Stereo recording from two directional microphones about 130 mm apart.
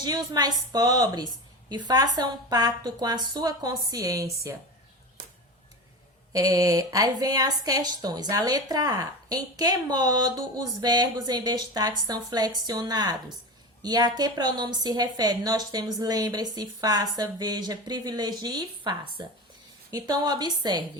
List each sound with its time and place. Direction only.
0.0 s a woman's voice: 30° right (ahead or behind)
6.3 s a woman's voice: 25° right (ahead or behind)